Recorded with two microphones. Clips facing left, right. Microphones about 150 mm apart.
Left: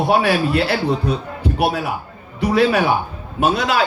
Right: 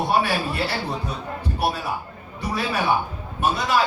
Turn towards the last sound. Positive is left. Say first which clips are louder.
# left 4 dB
turn(degrees=90)